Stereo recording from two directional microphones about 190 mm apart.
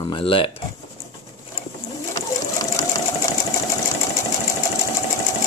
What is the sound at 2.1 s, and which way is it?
Sewing machine, 20° left (ahead or behind).